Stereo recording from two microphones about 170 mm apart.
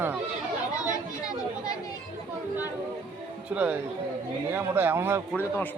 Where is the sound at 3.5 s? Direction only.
10° right (ahead or behind).